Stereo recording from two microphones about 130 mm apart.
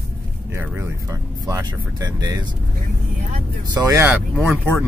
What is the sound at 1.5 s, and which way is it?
Speech, 30° right (ahead or behind).